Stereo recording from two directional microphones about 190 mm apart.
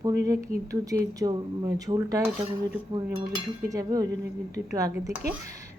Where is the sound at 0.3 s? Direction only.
15° right (ahead or behind).